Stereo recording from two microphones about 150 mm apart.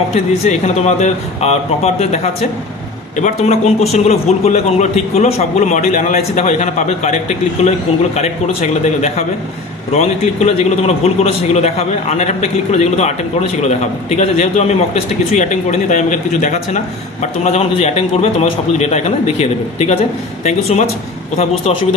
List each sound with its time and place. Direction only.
0.1 s a man's voice: 50° left (ahead or behind)